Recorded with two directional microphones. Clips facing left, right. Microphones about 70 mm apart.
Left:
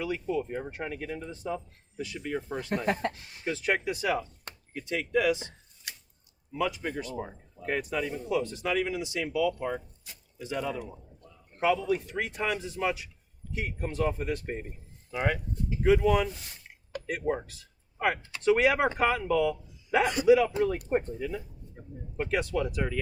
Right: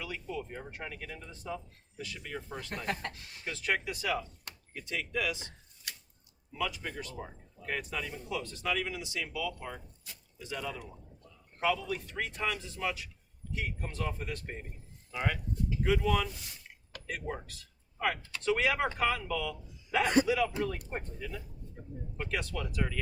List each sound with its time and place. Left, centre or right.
0.0 s speech: centre
4.2 s a man's voice: left